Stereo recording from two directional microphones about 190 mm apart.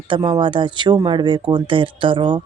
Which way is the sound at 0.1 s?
25° right (ahead or behind).